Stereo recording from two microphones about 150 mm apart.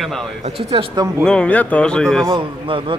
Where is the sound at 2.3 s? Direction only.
35° right (ahead or behind).